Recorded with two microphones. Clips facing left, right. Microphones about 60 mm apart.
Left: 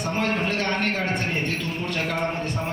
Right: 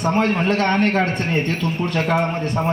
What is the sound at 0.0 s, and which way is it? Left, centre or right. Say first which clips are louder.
A man's voice: right 6 dB; right.